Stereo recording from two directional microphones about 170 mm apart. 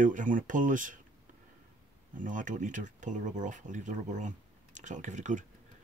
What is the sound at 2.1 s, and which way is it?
Speech, 50° right (ahead or behind).